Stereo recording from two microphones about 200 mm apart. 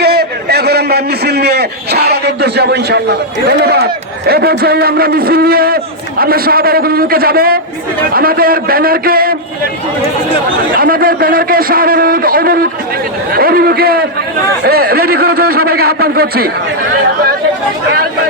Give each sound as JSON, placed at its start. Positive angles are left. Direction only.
{"t": 0.0, "sound": "a man's voice", "side_deg": -50}
{"t": 10.8, "sound": "a man's voice", "side_deg": -45}